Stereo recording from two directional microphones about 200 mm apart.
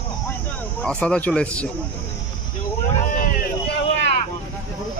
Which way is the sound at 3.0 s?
45° left (ahead or behind).